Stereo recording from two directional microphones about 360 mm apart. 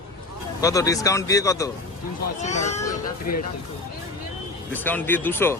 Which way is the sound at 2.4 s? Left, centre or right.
Centre.